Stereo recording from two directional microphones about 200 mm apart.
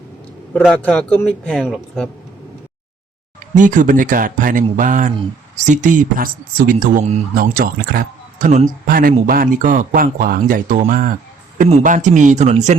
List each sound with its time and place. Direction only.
0.5 s speech: 5° left (ahead or behind)
3.5 s speech: 40° right (ahead or behind)